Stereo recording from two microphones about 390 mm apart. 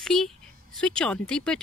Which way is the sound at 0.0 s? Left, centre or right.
Centre.